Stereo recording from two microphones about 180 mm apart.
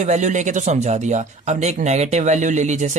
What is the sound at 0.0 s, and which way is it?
Speech, 40° right (ahead or behind).